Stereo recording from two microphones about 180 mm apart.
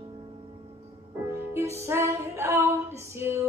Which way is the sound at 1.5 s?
15° right (ahead or behind).